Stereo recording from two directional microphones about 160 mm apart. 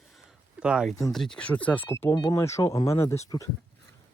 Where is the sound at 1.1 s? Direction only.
5° left (ahead or behind); by 3.5 s 20° left (ahead or behind).